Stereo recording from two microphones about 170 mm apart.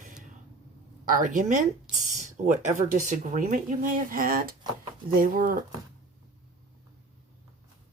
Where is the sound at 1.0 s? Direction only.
55° right (ahead or behind).